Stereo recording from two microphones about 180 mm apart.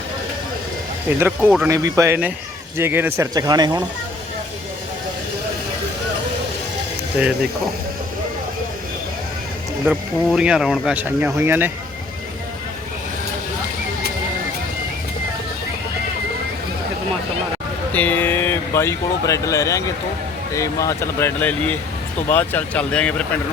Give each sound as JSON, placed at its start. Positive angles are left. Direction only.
{"t": 1.2, "sound": "speech", "side_deg": -10}
{"t": 9.8, "sound": "speech", "side_deg": 0}
{"t": 17.9, "sound": "speech", "side_deg": 10}